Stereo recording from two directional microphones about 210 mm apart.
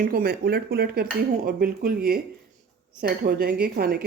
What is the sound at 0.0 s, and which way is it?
Speech, 45° right (ahead or behind).